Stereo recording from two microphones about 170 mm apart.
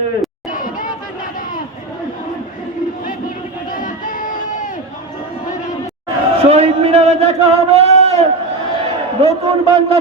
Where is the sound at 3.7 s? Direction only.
50° left (ahead or behind).